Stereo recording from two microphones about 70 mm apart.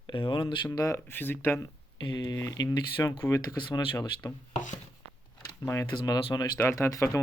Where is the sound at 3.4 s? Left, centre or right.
Left.